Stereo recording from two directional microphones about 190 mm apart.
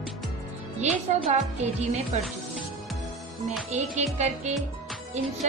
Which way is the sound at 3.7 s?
40° right (ahead or behind).